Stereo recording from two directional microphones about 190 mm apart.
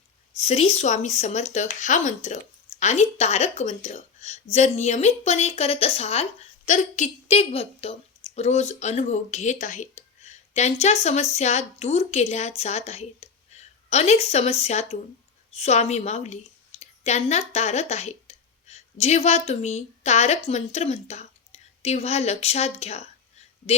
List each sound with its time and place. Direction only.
0.3 s a woman's voice: 35° left (ahead or behind)